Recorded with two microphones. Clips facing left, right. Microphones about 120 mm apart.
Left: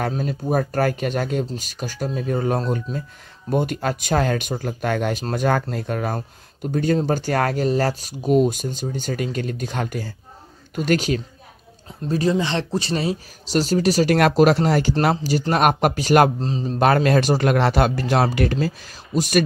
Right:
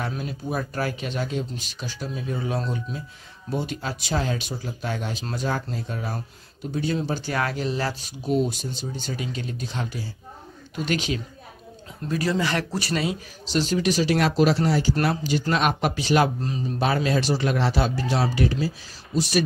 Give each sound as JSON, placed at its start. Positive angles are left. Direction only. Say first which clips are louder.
{"t": 0.1, "sound": "speech", "louder": "left 7 dB", "side_deg": 45}
{"t": 12.0, "sound": "speech", "louder": "left 4 dB", "side_deg": 25}
{"t": 16.3, "sound": "a man's voice", "louder": "left 4 dB", "side_deg": 30}
{"t": 16.8, "sound": "speech", "louder": "left 6 dB", "side_deg": 60}
{"t": 19.1, "sound": "speech", "louder": "left 4 dB", "side_deg": 50}